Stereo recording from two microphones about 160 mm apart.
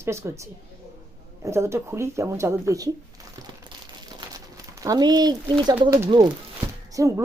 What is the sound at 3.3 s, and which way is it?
Crumpling, 25° right (ahead or behind).